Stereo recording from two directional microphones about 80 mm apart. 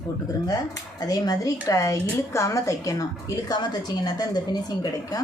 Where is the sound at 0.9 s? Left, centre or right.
Left.